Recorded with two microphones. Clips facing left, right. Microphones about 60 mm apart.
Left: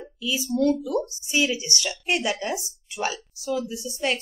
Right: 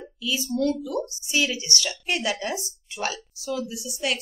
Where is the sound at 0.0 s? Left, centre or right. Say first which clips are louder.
Even; centre.